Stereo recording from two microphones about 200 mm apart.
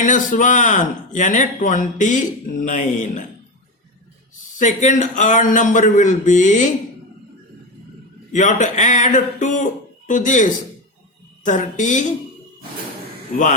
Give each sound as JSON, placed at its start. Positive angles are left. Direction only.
{"t": 0.0, "sound": "speech", "side_deg": 40}
{"t": 4.5, "sound": "speech", "side_deg": 40}
{"t": 8.3, "sound": "speech", "side_deg": 40}